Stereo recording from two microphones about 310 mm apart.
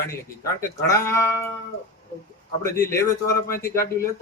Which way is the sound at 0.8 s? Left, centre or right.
Centre.